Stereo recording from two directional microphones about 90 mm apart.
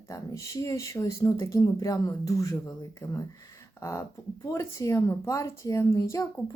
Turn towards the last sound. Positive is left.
turn(degrees=35)  # may be behind; listen again after turning